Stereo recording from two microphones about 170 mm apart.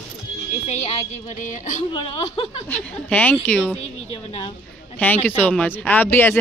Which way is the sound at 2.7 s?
10° left (ahead or behind).